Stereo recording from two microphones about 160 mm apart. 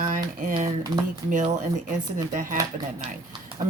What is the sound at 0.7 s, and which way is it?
Speech, 25° right (ahead or behind).